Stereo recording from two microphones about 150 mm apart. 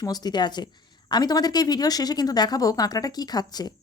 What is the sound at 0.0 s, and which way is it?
A woman's voice, 25° left (ahead or behind).